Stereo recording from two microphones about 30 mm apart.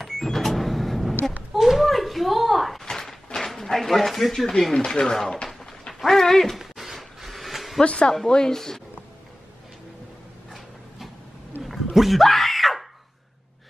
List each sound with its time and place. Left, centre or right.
0.0 s vehicle: centre
1.5 s a sound: centre
2.8 s a sound: centre
3.7 s speech: centre
4.7 s speech: left
5.5 s dog: centre
6.2 s speech: centre
6.5 s a sound: centre
7.8 s speech: left
8.5 s speech: centre
11.6 s dog: centre
12.2 s screaming: centre